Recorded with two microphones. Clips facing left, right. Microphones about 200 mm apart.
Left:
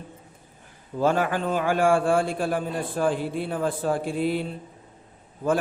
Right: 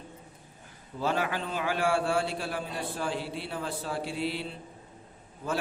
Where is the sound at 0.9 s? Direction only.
50° left (ahead or behind).